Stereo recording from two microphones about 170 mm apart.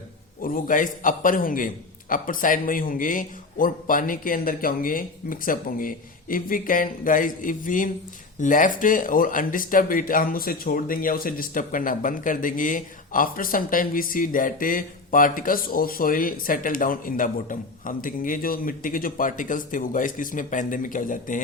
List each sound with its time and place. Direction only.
0.4 s speech: 50° left (ahead or behind)